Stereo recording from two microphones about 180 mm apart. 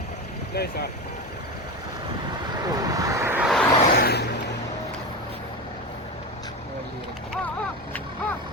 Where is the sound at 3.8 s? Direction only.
60° left (ahead or behind).